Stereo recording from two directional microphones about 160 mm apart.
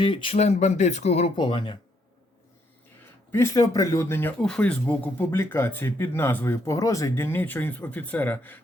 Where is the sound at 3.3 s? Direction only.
20° left (ahead or behind).